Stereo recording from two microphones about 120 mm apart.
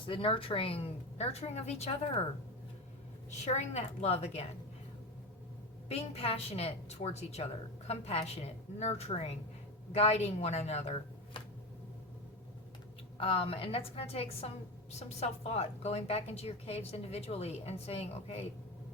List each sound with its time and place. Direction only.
0.1 s a woman's voice: 50° left (ahead or behind)
3.4 s a woman's voice: 70° left (ahead or behind)
5.9 s a woman's voice: 60° left (ahead or behind)
13.1 s a woman's voice: 50° left (ahead or behind)